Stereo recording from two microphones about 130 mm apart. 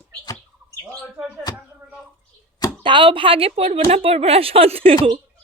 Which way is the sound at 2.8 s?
40° right (ahead or behind).